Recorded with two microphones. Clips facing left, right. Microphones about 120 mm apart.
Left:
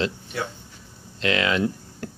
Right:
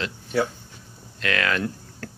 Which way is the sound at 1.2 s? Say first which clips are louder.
Left 3 dB; 20° left (ahead or behind).